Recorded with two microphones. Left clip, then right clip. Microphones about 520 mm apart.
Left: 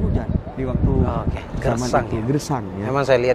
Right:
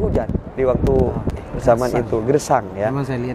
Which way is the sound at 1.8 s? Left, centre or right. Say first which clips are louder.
Even; left.